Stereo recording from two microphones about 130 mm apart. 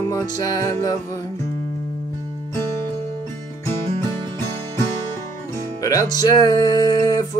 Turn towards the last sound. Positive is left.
turn(degrees=30)  # may be behind; listen again after turning